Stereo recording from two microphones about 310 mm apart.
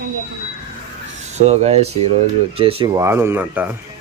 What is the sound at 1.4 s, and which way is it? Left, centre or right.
Speech, right.